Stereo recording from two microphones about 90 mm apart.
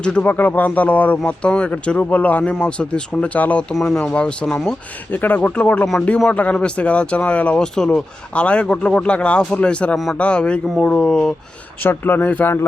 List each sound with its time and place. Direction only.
0.0 s speech: 15° left (ahead or behind)
5.1 s speech: 20° left (ahead or behind)
11.8 s speech: 25° left (ahead or behind)